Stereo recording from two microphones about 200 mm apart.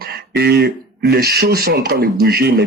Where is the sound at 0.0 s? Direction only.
50° right (ahead or behind).